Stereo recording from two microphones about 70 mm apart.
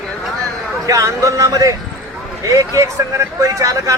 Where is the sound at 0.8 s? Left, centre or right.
Right.